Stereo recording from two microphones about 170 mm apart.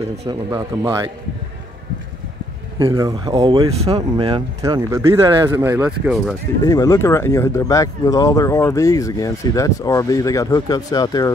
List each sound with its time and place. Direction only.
0.3 s speech: 20° right (ahead or behind)
3.0 s speech: 25° right (ahead or behind)
5.9 s speech: 5° right (ahead or behind)
6.6 s speech: 20° left (ahead or behind)